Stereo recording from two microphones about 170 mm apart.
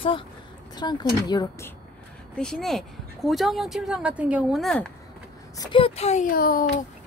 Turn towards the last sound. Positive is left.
turn(degrees=60)  # may be behind; listen again after turning